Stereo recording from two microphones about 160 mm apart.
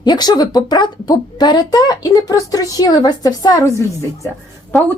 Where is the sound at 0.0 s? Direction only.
25° left (ahead or behind).